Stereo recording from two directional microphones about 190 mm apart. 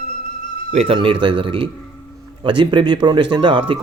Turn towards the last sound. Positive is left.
turn(degrees=-25)  # may be behind; listen again after turning